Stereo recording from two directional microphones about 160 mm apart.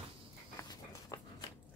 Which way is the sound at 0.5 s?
20° left (ahead or behind).